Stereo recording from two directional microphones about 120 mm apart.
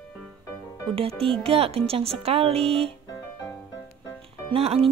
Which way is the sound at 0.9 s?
55° right (ahead or behind).